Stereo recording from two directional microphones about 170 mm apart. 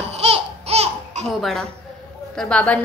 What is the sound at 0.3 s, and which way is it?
Laughter, 40° right (ahead or behind).